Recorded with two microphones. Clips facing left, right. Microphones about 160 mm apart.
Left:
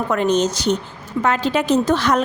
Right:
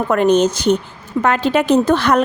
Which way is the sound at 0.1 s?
55° right (ahead or behind).